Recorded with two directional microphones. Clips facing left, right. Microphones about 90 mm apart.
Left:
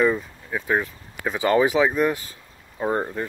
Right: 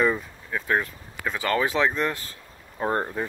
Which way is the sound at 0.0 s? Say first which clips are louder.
Left 3 dB; centre (ahead or behind).